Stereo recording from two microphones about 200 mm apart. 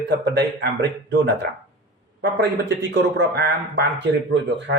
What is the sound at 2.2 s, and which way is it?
A man's voice, 60° right (ahead or behind).